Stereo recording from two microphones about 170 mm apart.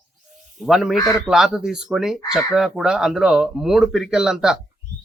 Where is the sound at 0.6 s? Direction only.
Centre (ahead or behind).